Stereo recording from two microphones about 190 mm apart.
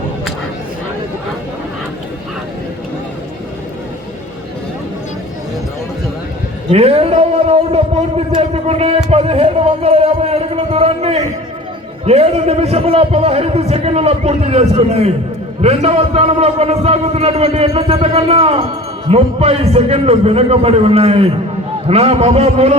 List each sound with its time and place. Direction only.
6.7 s a man's voice: 35° right (ahead or behind)